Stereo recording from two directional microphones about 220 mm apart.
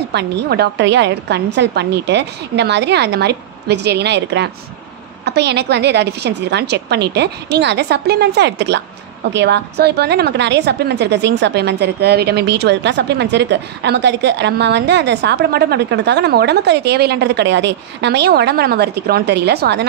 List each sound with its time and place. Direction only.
0.1 s a woman's voice: 50° right (ahead or behind)